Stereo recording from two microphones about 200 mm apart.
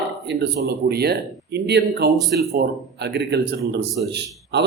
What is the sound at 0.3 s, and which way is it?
A man's voice, 55° right (ahead or behind).